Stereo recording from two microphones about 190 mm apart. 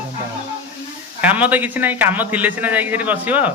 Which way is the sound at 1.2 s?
10° right (ahead or behind).